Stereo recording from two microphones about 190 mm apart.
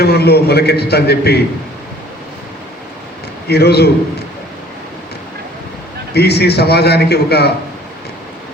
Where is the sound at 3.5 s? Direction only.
60° left (ahead or behind).